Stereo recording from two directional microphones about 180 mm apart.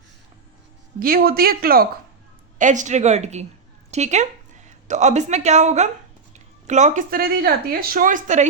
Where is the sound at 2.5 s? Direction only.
45° right (ahead or behind).